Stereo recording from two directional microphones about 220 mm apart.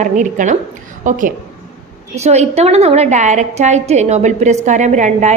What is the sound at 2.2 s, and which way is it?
A woman's voice, 30° right (ahead or behind).